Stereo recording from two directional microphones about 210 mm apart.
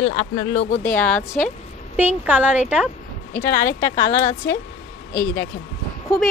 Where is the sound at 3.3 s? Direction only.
15° left (ahead or behind).